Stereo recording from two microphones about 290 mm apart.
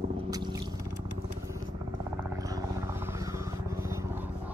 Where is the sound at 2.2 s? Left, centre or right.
Centre.